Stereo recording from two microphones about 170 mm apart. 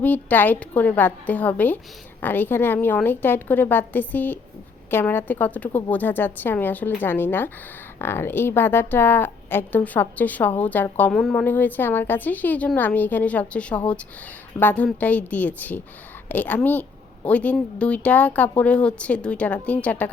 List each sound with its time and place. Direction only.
0.0 s a woman's voice: 10° left (ahead or behind)